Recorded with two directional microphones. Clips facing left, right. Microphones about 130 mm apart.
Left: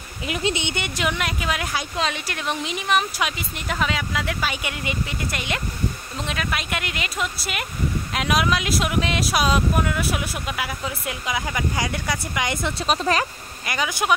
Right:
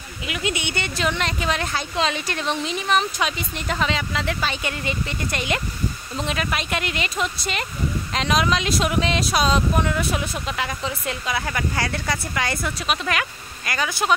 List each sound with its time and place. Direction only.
0.3 s speech: 30° left (ahead or behind)
12.8 s speech: 35° left (ahead or behind)
13.7 s speech: 15° left (ahead or behind)